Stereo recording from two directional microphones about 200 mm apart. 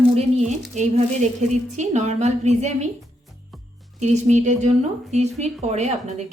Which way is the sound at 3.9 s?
35° right (ahead or behind).